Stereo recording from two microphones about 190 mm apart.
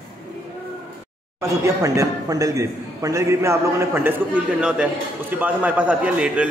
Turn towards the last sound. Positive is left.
turn(degrees=-5)  # may be behind; listen again after turning